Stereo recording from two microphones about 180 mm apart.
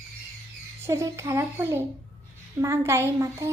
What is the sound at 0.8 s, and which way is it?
A woman's voice, 15° right (ahead or behind).